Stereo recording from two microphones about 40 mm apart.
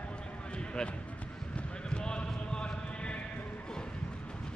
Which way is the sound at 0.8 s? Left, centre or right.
Centre.